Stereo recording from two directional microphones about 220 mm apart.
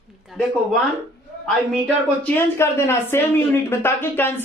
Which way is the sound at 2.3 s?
10° left (ahead or behind).